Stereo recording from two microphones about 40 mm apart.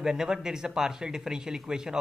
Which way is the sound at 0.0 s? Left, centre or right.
Centre.